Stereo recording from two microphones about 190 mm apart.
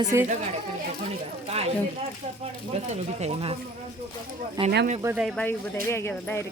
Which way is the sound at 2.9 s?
35° right (ahead or behind).